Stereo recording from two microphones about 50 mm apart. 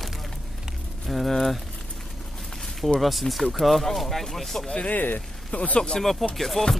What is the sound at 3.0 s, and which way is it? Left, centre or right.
Speech, centre.